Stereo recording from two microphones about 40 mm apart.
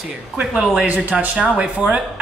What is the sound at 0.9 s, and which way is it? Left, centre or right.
Speech, right.